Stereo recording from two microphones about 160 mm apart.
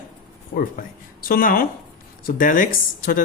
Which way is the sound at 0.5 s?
70° left (ahead or behind).